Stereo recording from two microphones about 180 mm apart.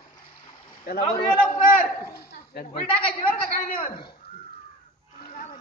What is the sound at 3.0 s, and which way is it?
Speech, 30° left (ahead or behind).